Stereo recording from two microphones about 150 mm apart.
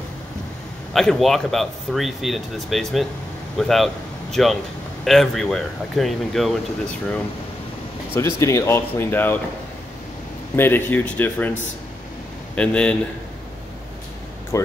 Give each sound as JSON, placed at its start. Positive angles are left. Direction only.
{"t": 0.9, "sound": "speech", "side_deg": 0}
{"t": 8.1, "sound": "speech", "side_deg": 15}
{"t": 10.5, "sound": "speech", "side_deg": 15}
{"t": 12.5, "sound": "speech", "side_deg": 5}
{"t": 14.5, "sound": "speech", "side_deg": 20}